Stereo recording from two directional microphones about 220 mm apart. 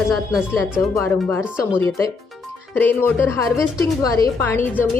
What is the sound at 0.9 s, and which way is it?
Speech, 10° left (ahead or behind).